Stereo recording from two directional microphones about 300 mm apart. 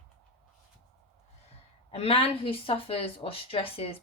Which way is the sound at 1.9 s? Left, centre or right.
Centre.